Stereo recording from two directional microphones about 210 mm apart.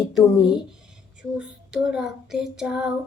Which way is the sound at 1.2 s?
5° right (ahead or behind).